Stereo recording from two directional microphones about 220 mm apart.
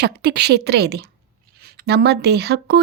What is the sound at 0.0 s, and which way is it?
A woman's voice, 50° right (ahead or behind).